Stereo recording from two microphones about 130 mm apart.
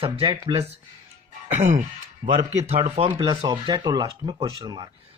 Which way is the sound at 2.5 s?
55° right (ahead or behind).